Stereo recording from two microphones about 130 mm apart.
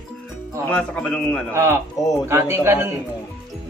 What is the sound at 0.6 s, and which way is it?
Speech, 10° left (ahead or behind).